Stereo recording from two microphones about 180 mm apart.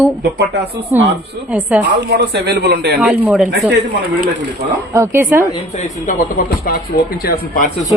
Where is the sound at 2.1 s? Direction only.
65° right (ahead or behind).